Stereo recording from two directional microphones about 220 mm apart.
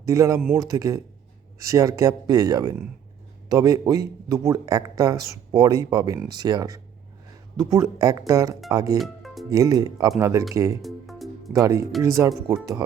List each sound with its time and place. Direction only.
0.0 s speech: 15° right (ahead or behind)
9.0 s music: centre (ahead or behind)
9.5 s speech: 15° right (ahead or behind)
10.8 s music: centre (ahead or behind)
11.5 s speech: 15° right (ahead or behind)